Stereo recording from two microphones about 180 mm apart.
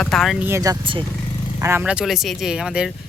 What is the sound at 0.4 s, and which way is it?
Speech, 15° right (ahead or behind).